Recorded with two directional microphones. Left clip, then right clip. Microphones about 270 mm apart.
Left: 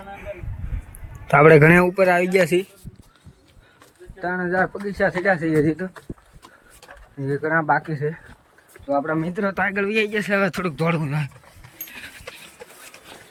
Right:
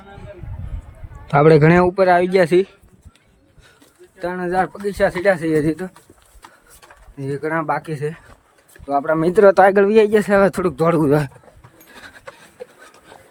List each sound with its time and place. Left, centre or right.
1.3 s speech: centre
4.2 s speech: centre
7.2 s speech: centre; by 11.3 s right